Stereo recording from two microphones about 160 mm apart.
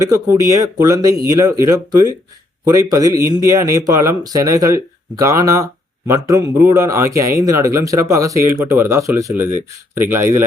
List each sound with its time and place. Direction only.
0.0 s speech: 20° right (ahead or behind)